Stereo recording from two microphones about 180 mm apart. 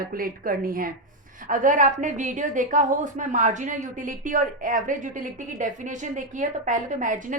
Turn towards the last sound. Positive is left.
turn(degrees=-45)  # may be behind; listen again after turning